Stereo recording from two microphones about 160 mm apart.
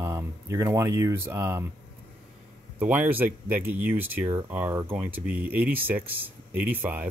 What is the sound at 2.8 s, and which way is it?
Speech, 10° right (ahead or behind).